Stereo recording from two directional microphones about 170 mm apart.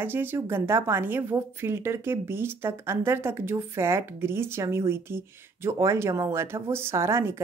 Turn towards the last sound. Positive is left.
turn(degrees=-15)  # may be behind; listen again after turning